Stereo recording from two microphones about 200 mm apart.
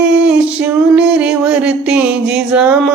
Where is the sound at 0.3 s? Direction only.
5° right (ahead or behind).